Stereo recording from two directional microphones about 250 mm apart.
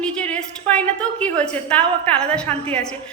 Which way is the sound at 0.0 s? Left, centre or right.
Centre.